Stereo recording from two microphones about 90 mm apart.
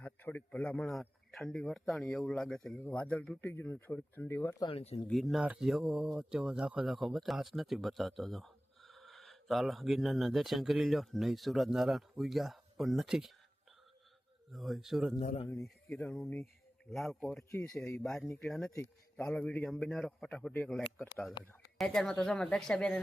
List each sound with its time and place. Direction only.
0.0 s a man's voice: 20° left (ahead or behind)
0.9 s speech: 5° left (ahead or behind)
2.8 s a man's voice: 15° left (ahead or behind)
4.6 s speech: 90° left
5.0 s speech: centre (ahead or behind)
5.4 s speech: 10° right (ahead or behind)
14.5 s speech: centre (ahead or behind)
16.2 s speech: 25° left (ahead or behind)
16.9 s speech: centre (ahead or behind)
17.5 s speech: 25° left (ahead or behind)
18.0 s a man's voice: 5° left (ahead or behind)
21.8 s a man's voice: 5° left (ahead or behind)